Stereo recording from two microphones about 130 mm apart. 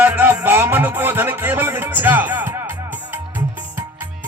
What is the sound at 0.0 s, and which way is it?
Music, 10° right (ahead or behind).